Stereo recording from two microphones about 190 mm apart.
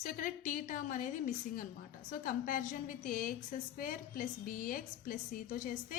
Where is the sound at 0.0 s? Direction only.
45° left (ahead or behind).